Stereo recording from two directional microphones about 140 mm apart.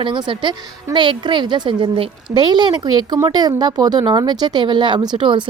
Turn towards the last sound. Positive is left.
turn(degrees=-35)  # may be behind; listen again after turning